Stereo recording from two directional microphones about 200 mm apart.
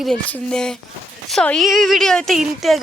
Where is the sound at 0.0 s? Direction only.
5° left (ahead or behind).